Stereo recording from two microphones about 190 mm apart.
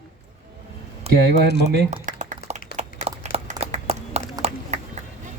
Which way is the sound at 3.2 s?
35° right (ahead or behind).